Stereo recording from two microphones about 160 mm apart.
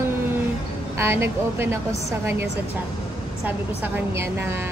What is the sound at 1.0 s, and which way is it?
Speech, 15° right (ahead or behind).